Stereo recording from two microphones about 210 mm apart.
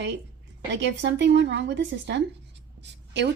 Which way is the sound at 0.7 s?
55° right (ahead or behind).